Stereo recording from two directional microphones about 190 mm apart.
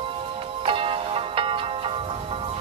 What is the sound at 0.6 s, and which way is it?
Music, 30° right (ahead or behind).